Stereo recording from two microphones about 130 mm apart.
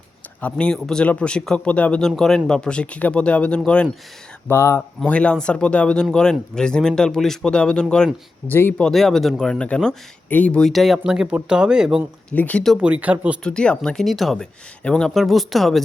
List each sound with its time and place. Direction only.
0.4 s speech: 5° left (ahead or behind)
12.3 s speech: 10° left (ahead or behind)
12.7 s speech: 10° right (ahead or behind)
13.4 s speech: 5° left (ahead or behind)